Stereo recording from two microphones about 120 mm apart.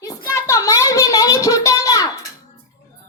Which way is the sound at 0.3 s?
25° left (ahead or behind).